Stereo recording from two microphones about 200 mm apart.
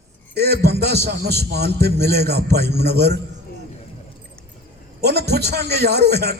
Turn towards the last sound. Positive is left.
turn(degrees=-55)  # may be behind; listen again after turning